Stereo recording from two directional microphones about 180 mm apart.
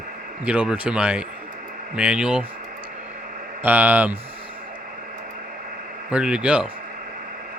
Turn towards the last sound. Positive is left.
turn(degrees=-5)  # may be behind; listen again after turning